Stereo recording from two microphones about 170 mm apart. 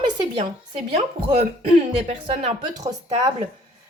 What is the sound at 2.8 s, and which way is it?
Speech, 25° right (ahead or behind).